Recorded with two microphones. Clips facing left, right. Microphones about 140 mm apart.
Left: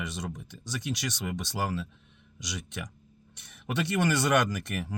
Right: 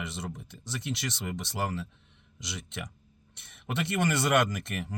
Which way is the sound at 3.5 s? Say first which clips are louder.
Left 2 dB; 25° right (ahead or behind).